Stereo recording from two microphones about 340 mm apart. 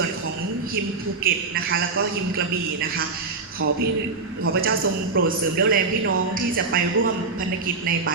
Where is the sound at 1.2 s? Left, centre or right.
Right.